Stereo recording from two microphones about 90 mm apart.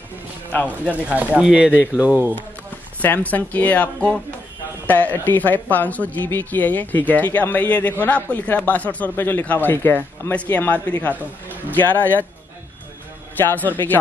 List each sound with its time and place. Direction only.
0.7 s speech: 15° right (ahead or behind)
3.0 s speech: 20° left (ahead or behind)
13.4 s speech: 20° left (ahead or behind)